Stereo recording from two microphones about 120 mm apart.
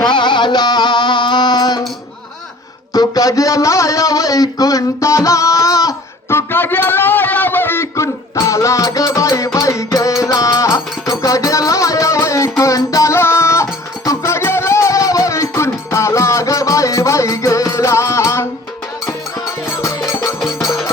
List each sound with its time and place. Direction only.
0.1 s music: 40° left (ahead or behind)
2.9 s a man's voice: 30° left (ahead or behind)
6.3 s a sound: 15° left (ahead or behind)
19.7 s music: 25° left (ahead or behind)